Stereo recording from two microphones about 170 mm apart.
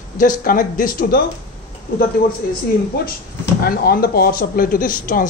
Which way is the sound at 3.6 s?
60° left (ahead or behind).